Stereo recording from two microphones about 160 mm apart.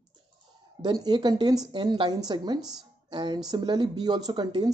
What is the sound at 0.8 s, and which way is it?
A woman's voice, 25° right (ahead or behind).